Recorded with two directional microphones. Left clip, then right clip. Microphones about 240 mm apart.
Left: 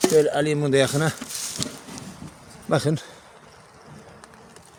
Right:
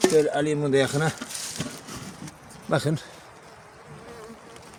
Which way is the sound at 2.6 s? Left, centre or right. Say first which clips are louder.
Left 3 dB; centre.